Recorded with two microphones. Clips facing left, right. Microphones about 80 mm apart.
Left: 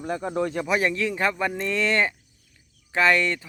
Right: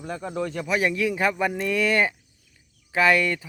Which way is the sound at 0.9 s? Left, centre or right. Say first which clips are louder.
Right 1 dB; centre.